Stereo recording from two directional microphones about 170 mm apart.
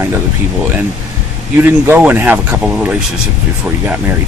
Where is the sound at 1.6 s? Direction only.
10° right (ahead or behind).